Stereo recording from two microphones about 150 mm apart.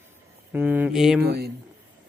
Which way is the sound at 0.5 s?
10° right (ahead or behind).